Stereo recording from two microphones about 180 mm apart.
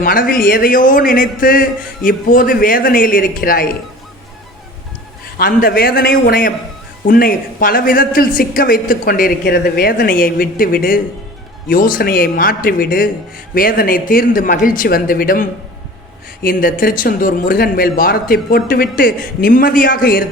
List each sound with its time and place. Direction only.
0.0 s speech: 50° left (ahead or behind)
5.4 s a man's voice: 55° left (ahead or behind)